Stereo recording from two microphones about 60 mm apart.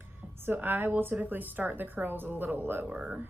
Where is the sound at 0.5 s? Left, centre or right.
Right.